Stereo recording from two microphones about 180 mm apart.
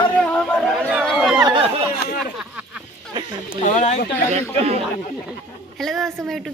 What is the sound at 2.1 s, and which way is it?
Speech, 55° left (ahead or behind).